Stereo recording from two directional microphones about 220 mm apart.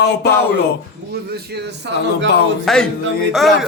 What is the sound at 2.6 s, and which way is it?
Speech, 5° left (ahead or behind).